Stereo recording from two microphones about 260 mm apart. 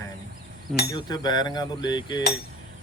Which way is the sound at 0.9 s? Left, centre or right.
Centre.